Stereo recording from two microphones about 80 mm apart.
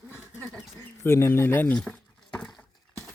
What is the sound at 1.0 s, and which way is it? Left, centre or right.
Speech, left.